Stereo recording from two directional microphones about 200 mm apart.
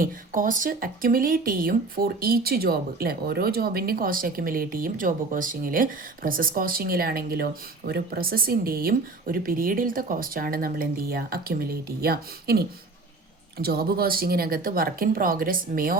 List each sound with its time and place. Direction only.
0.0 s speech: 40° right (ahead or behind)